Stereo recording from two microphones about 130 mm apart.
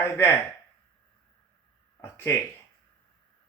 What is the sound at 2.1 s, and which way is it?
Speech, 20° left (ahead or behind).